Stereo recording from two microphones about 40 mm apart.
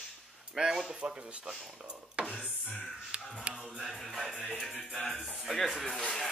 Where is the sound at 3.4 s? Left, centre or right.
Right.